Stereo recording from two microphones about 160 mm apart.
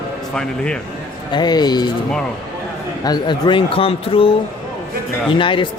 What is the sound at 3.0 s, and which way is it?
Speech, 25° left (ahead or behind).